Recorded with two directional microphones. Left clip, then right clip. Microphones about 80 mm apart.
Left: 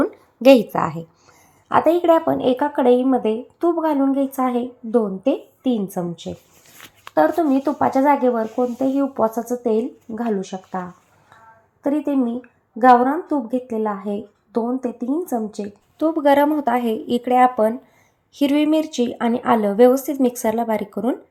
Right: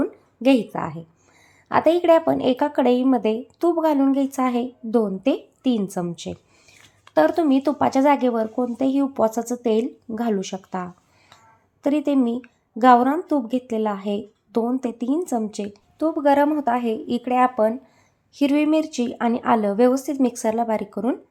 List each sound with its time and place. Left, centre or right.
0.4 s speech: left
1.7 s a woman's voice: left
7.1 s a woman's voice: centre
9.3 s a woman's voice: centre
13.5 s a woman's voice: centre
15.6 s a woman's voice: centre
16.0 s speech: left